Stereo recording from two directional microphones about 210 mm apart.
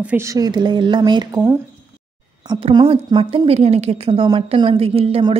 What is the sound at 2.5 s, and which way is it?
A woman's voice, 25° right (ahead or behind).